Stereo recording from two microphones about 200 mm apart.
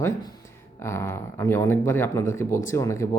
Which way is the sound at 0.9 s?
15° left (ahead or behind).